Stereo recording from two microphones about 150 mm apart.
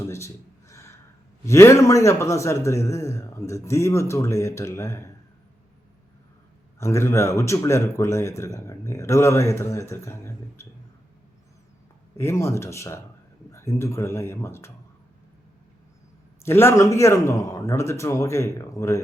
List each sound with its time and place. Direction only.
0.0 s a sound: 20° left (ahead or behind)
1.5 s speech: 20° left (ahead or behind)
6.7 s speech: 20° left (ahead or behind)
12.1 s speech: 20° left (ahead or behind)
16.5 s speech: 15° left (ahead or behind)